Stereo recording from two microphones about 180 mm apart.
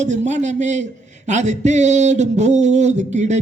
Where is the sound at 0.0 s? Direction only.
40° right (ahead or behind).